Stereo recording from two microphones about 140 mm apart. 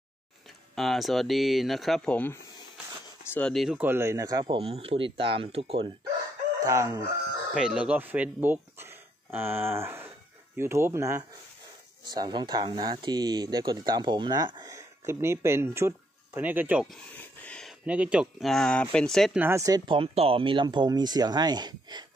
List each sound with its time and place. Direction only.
0.7 s speech: centre (ahead or behind)
3.7 s speech: 15° right (ahead or behind)
4.6 s speech: 45° right (ahead or behind)
6.6 s speech: 25° right (ahead or behind)
7.5 s speech: 5° right (ahead or behind)
12.1 s speech: 30° right (ahead or behind); by 16.9 s 10° right (ahead or behind)
17.2 s a sound: 10° left (ahead or behind)
17.8 s speech: 10° right (ahead or behind)
19.3 s speech: 15° right (ahead or behind)
19.9 s speech: 40° right (ahead or behind)